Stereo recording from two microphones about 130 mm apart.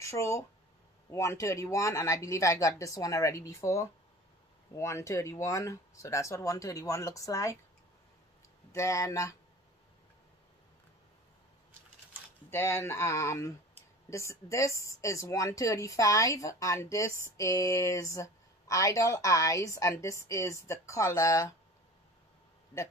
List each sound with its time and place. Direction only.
0.0 s speech: 20° left (ahead or behind)
8.7 s speech: 25° left (ahead or behind)
12.4 s speech: 20° left (ahead or behind)